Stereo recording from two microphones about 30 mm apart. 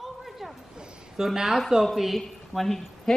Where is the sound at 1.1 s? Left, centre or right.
Centre.